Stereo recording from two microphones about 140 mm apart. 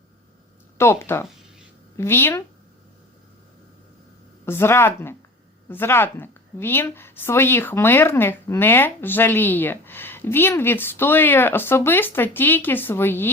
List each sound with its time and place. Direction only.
0.8 s a woman's voice: 15° left (ahead or behind)
4.4 s a woman's voice: 15° left (ahead or behind)